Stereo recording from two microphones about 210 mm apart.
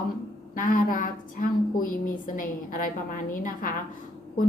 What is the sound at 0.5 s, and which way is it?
A woman's voice, 40° left (ahead or behind).